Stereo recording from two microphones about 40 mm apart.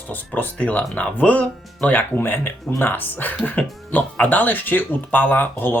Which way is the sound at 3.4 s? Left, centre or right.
Left.